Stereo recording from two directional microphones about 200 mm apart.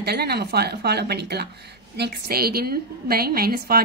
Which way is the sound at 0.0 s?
55° right (ahead or behind).